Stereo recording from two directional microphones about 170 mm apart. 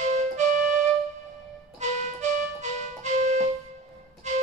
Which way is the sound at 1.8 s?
45° right (ahead or behind).